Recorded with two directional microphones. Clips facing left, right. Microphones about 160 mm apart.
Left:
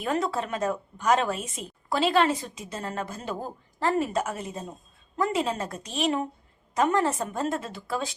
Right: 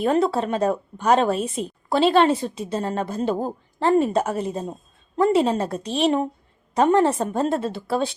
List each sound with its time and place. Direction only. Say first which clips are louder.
0.0 s a woman's voice: right 7 dB; 30° right (ahead or behind)